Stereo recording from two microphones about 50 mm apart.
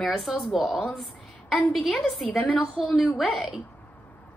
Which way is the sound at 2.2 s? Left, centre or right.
Left.